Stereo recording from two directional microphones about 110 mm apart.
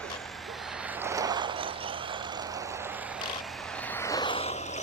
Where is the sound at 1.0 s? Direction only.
30° right (ahead or behind); by 1.7 s 50° right (ahead or behind).